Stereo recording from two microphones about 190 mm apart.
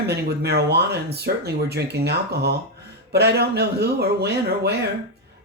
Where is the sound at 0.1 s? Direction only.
60° right (ahead or behind).